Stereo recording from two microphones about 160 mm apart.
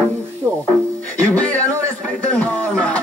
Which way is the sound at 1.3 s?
10° left (ahead or behind).